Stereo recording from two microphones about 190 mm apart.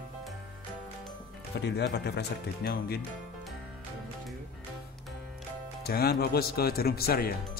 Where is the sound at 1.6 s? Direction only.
60° left (ahead or behind).